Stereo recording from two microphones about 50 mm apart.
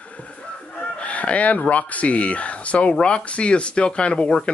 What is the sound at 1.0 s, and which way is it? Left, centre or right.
Speech, left.